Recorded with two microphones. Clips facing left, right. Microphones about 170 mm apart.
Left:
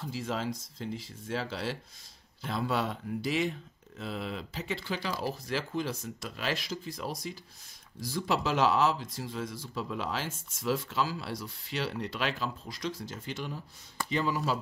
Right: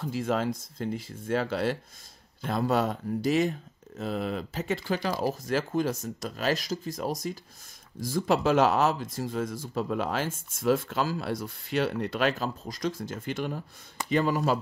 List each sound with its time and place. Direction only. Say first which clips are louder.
0.0 s speech: right 6 dB; 55° right (ahead or behind)